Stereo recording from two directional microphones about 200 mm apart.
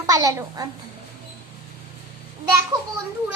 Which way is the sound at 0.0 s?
15° right (ahead or behind).